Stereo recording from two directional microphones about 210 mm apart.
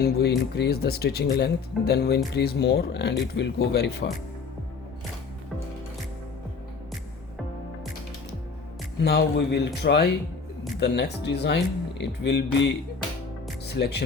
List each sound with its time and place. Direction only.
0.0 s speech: 50° left (ahead or behind)
9.0 s speech: 50° left (ahead or behind)